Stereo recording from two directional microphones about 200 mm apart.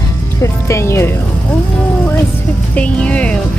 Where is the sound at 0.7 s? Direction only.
15° left (ahead or behind).